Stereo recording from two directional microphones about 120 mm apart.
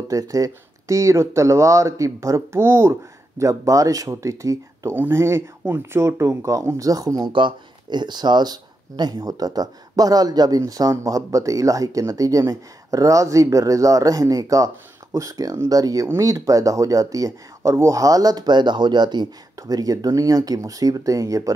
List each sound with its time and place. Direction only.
0.1 s speech: 30° right (ahead or behind)